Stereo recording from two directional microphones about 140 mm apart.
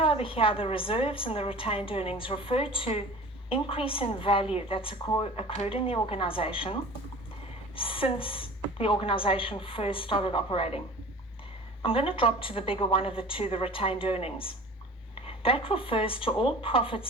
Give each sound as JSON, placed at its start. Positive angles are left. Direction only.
{"t": 0.0, "sound": "a woman's voice", "side_deg": 40}
{"t": 7.8, "sound": "a woman's voice", "side_deg": 40}
{"t": 11.8, "sound": "a woman's voice", "side_deg": 40}